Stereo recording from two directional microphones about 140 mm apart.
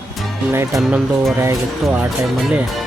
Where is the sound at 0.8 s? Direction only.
5° right (ahead or behind).